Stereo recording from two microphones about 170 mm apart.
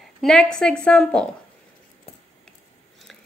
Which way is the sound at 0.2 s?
Centre (ahead or behind).